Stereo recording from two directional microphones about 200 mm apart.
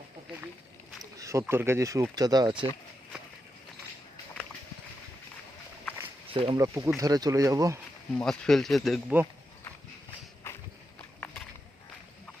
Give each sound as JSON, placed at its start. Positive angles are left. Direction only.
{"t": 1.2, "sound": "speech", "side_deg": -15}
{"t": 6.2, "sound": "a sound", "side_deg": -25}
{"t": 6.6, "sound": "speech", "side_deg": -15}
{"t": 8.1, "sound": "speech", "side_deg": 5}